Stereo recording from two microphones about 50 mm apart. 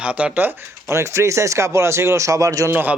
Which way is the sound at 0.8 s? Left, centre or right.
Right.